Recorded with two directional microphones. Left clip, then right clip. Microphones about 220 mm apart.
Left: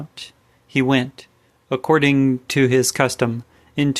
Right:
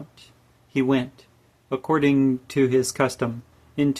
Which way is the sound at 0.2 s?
30° left (ahead or behind).